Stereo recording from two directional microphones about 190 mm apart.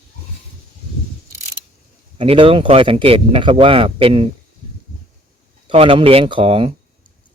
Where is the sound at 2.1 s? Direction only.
30° right (ahead or behind).